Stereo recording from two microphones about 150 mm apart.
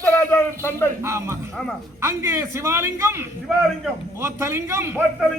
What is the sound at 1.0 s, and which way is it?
A man's voice, 20° right (ahead or behind).